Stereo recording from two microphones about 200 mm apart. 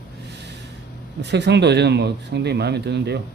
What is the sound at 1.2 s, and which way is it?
Speech, 60° right (ahead or behind).